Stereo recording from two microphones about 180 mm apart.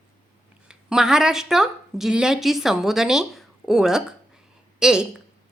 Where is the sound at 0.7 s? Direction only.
5° right (ahead or behind).